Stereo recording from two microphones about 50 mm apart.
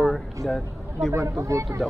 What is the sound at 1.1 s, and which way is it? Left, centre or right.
Speech, right.